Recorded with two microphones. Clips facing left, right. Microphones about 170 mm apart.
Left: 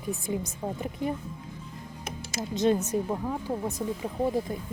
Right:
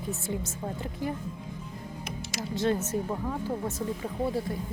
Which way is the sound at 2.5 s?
20° left (ahead or behind).